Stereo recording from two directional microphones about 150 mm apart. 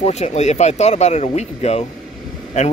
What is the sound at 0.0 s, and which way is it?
A man's voice, 50° left (ahead or behind).